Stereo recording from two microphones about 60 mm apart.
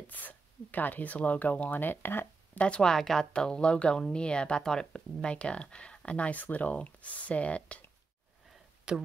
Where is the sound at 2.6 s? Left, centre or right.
Centre.